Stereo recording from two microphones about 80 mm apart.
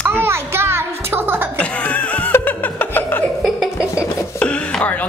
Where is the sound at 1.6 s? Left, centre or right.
Centre.